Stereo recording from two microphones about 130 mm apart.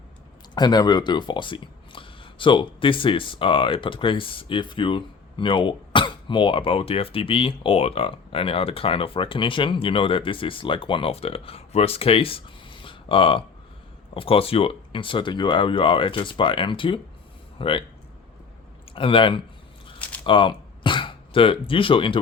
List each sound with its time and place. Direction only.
0.5 s speech: 35° left (ahead or behind)
18.9 s speech: 45° left (ahead or behind)